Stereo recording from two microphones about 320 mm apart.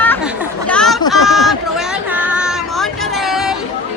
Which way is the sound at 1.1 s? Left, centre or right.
Centre.